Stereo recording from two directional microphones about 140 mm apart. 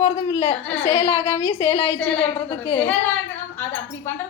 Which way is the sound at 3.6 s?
15° left (ahead or behind).